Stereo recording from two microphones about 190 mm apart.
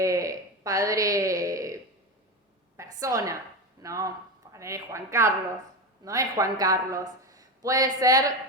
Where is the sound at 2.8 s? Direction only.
15° right (ahead or behind).